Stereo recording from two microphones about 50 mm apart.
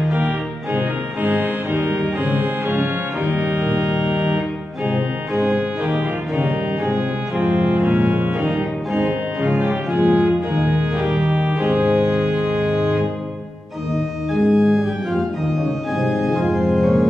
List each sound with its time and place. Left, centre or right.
0.7 s organ: right
6.4 s music: right
9.4 s organ: right
12.1 s music: centre
13.9 s organ: centre